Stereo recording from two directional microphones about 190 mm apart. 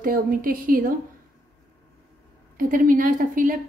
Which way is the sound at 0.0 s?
50° right (ahead or behind).